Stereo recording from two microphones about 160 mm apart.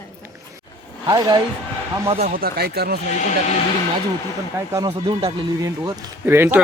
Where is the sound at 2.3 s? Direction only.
70° right (ahead or behind).